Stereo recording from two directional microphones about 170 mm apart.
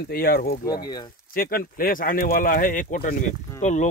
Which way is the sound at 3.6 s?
45° left (ahead or behind).